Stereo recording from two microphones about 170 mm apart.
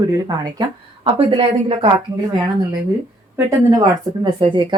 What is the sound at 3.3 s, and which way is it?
Speech, 20° right (ahead or behind).